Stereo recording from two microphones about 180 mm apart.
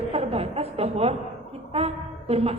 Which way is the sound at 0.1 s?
35° right (ahead or behind).